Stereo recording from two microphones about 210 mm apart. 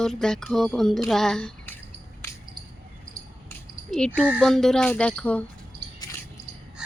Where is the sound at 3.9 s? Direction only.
5° left (ahead or behind).